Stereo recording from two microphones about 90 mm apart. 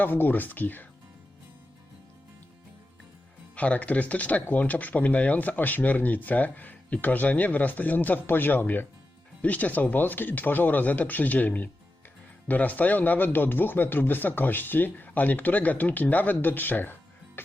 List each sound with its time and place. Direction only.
0.0 s speech: 20° left (ahead or behind)
3.5 s speech: 15° left (ahead or behind)